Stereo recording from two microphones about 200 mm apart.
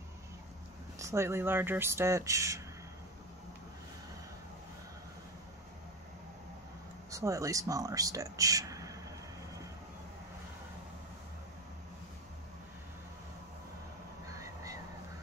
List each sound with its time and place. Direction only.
0.9 s speech: 15° right (ahead or behind)
7.1 s speech: 15° right (ahead or behind)